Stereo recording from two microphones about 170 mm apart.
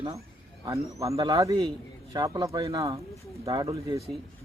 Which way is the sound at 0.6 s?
20° right (ahead or behind).